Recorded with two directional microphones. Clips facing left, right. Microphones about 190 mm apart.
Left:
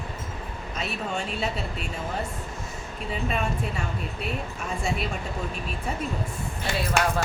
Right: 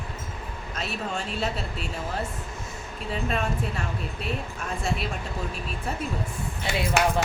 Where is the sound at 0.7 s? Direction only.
Centre (ahead or behind).